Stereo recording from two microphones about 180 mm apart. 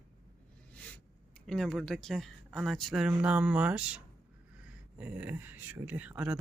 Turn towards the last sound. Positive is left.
turn(degrees=-5)  # may be behind; listen again after turning